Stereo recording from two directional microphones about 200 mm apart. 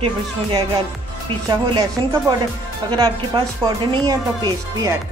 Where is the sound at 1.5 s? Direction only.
20° right (ahead or behind).